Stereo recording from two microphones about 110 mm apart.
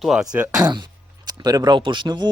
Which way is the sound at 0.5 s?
40° right (ahead or behind).